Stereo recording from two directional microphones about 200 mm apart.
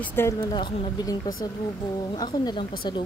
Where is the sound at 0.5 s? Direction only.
20° left (ahead or behind).